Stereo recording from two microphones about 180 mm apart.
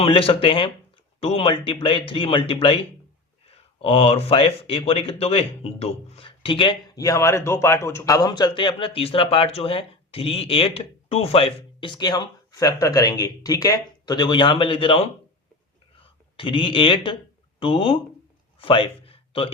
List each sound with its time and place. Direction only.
0.0 s speech: 30° left (ahead or behind)
16.4 s speech: 30° left (ahead or behind)
18.6 s a sound: 30° left (ahead or behind)